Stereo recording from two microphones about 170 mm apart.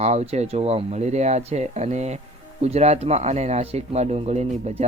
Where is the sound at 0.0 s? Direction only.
40° right (ahead or behind).